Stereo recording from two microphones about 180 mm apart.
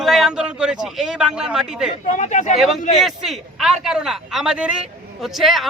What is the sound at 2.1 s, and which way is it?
Speech, 40° left (ahead or behind).